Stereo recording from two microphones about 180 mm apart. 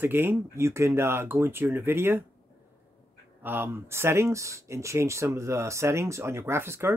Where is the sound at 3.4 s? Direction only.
10° right (ahead or behind).